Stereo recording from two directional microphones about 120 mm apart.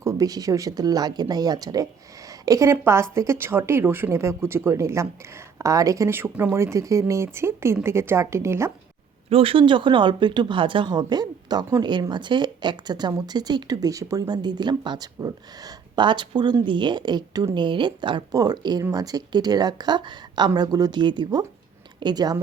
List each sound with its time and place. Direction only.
0.0 s a woman's voice: 25° right (ahead or behind)
9.3 s speech: 50° right (ahead or behind); by 22.4 s 35° right (ahead or behind)